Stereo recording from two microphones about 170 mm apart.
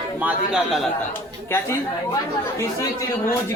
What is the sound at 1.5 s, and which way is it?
Speech, 15° left (ahead or behind).